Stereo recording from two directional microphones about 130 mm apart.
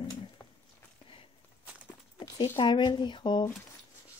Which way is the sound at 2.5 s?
35° left (ahead or behind).